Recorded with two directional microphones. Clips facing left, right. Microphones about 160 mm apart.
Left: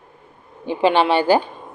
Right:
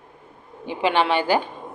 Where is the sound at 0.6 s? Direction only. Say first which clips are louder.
Left 4 dB; 35° left (ahead or behind).